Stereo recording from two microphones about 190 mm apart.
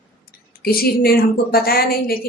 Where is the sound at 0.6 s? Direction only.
55° left (ahead or behind).